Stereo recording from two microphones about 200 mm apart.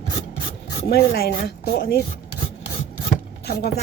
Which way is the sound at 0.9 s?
50° left (ahead or behind).